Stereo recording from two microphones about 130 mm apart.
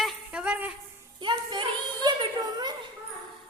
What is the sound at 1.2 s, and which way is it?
Music, 35° right (ahead or behind).